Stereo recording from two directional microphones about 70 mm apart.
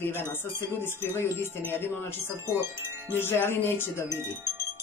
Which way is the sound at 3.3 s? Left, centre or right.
Left.